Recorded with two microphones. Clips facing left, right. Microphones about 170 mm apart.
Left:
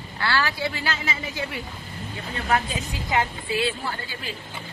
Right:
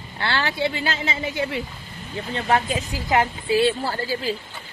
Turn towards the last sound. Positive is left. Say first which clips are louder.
# right 7 dB
turn(degrees=-35)  # may be behind; listen again after turning